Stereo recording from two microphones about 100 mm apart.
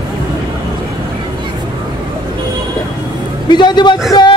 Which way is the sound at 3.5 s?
50° left (ahead or behind).